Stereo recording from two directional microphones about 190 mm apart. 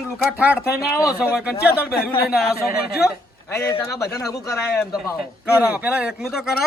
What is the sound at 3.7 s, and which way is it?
Speech, 15° left (ahead or behind).